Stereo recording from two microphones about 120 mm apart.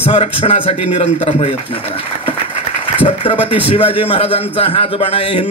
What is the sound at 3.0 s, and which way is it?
A man's voice, 45° left (ahead or behind).